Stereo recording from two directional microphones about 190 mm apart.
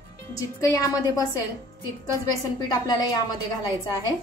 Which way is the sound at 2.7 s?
20° left (ahead or behind).